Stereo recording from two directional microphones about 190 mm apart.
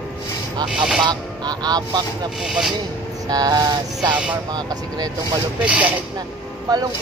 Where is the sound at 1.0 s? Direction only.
20° right (ahead or behind).